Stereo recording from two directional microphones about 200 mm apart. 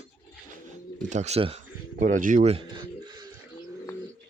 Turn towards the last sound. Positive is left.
turn(degrees=-20)  # may be behind; listen again after turning